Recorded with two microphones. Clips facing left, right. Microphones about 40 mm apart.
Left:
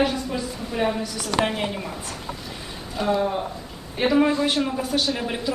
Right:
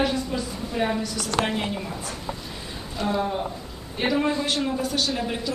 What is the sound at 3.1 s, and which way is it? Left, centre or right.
Speech, centre.